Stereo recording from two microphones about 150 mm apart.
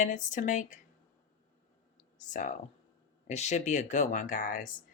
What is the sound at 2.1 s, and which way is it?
Speech, 60° left (ahead or behind).